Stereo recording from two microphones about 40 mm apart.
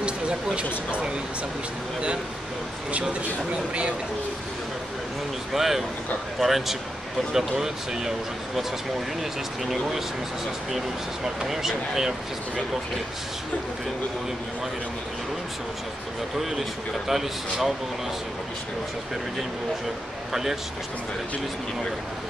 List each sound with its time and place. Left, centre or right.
2.9 s speech: right
5.5 s speech: centre
9.7 s speech: centre
11.4 s speech: centre
17.1 s speech: centre